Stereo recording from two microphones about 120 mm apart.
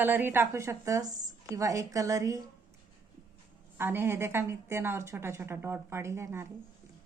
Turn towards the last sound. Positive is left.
turn(degrees=-20)  # may be behind; listen again after turning